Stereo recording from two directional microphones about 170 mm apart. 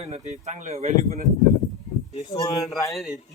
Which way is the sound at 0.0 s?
40° right (ahead or behind).